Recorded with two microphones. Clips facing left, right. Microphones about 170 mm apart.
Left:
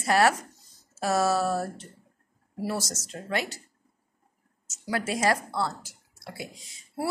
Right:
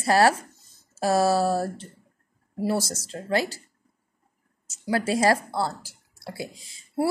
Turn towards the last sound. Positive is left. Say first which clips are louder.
# right 4 dB
turn(degrees=-30)  # may be behind; listen again after turning